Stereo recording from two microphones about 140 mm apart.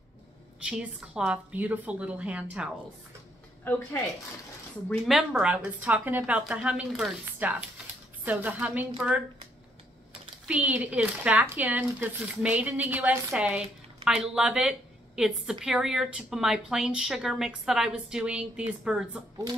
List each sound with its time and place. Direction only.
0.7 s speech: 5° right (ahead or behind)
4.8 s speech: centre (ahead or behind)
10.4 s a woman's voice: 10° right (ahead or behind)